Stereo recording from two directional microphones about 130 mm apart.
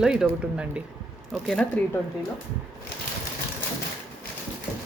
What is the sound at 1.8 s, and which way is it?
Speech, 10° left (ahead or behind).